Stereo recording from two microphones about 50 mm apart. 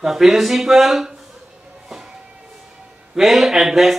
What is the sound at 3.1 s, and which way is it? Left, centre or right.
Speech, centre.